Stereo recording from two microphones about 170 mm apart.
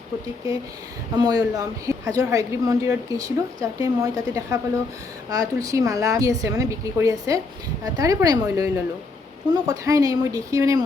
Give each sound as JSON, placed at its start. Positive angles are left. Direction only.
{"t": 1.1, "sound": "a woman's voice", "side_deg": -20}